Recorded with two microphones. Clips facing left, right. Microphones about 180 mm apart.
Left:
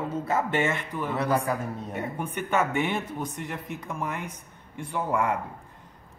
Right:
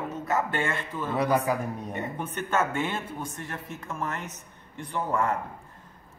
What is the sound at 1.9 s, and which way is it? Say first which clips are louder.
Speech: left 3 dB; 10° left (ahead or behind).